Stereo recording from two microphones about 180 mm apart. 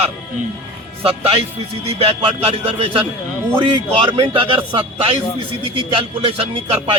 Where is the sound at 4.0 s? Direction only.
30° right (ahead or behind).